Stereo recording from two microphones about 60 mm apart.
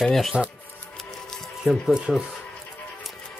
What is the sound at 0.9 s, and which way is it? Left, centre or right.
Music, centre.